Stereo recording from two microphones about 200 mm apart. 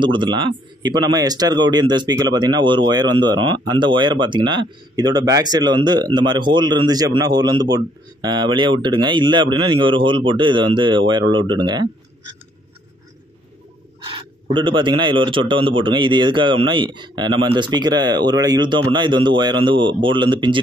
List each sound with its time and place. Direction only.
0.0 s speech: 25° right (ahead or behind)
14.0 s speech: 25° right (ahead or behind)